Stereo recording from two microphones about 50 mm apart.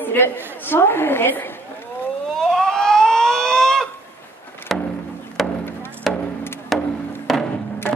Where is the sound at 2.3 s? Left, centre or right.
Centre.